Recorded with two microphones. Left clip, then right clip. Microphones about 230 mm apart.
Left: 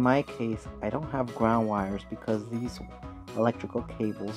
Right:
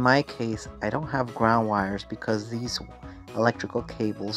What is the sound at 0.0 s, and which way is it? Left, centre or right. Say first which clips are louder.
Speech: right 4 dB; centre.